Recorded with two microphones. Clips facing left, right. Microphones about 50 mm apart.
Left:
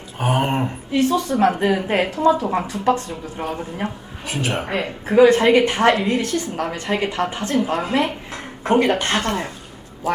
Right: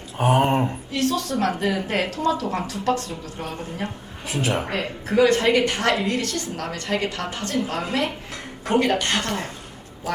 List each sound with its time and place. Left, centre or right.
0.2 s a woman's voice: centre; by 9.5 s left